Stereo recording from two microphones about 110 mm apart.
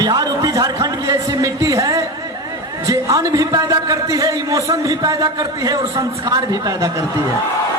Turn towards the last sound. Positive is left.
turn(degrees=-30)  # may be behind; listen again after turning